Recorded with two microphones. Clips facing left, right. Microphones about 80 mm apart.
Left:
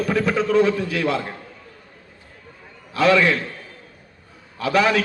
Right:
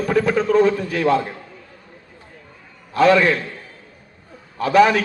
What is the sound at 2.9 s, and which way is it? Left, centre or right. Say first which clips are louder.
Speech: right 2 dB; right.